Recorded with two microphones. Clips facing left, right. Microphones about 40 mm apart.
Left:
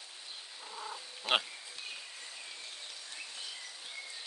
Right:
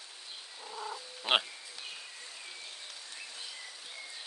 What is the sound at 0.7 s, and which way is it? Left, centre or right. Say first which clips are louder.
Cat: right 3 dB; centre.